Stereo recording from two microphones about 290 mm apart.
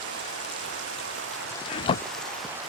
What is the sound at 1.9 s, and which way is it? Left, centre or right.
Rain, centre.